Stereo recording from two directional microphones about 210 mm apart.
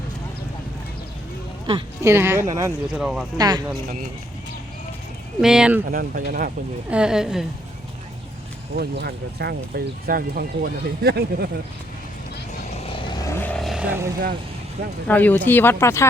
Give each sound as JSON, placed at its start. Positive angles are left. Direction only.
{"t": 1.6, "sound": "speech", "side_deg": -20}
{"t": 2.9, "sound": "a woman's voice", "side_deg": 0}
{"t": 3.3, "sound": "speech", "side_deg": -20}
{"t": 5.4, "sound": "a woman's voice", "side_deg": -5}
{"t": 5.9, "sound": "speech", "side_deg": -45}
{"t": 6.9, "sound": "a woman's voice", "side_deg": -5}
{"t": 8.8, "sound": "speech", "side_deg": -50}
{"t": 12.7, "sound": "vehicle", "side_deg": 25}
{"t": 15.0, "sound": "speech", "side_deg": 10}